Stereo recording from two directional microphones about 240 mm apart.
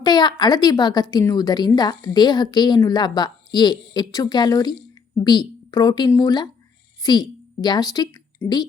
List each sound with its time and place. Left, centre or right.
0.0 s a woman's voice: centre